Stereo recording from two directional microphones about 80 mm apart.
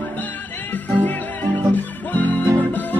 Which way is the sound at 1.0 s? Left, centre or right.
Left.